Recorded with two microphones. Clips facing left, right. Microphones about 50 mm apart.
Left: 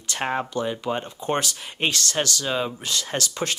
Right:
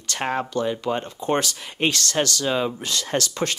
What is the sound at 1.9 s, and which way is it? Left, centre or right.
Speech, right.